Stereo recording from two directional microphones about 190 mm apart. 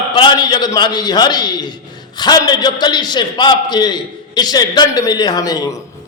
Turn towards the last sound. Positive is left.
turn(degrees=20)  # may be behind; listen again after turning